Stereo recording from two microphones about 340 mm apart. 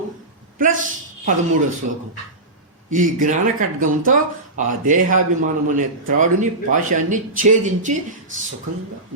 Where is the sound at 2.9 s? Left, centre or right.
Right.